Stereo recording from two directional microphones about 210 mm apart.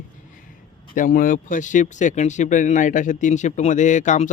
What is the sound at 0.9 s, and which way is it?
Speech, 40° left (ahead or behind).